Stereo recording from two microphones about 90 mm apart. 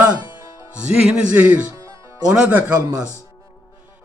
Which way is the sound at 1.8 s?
40° right (ahead or behind).